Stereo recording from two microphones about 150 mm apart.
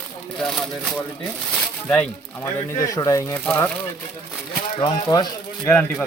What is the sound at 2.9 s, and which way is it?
Speech, 20° left (ahead or behind).